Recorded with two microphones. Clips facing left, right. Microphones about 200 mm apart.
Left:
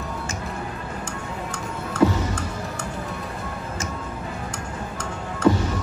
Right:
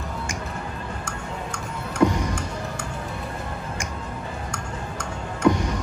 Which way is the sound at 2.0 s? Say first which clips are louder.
Left 1 dB; 15° right (ahead or behind).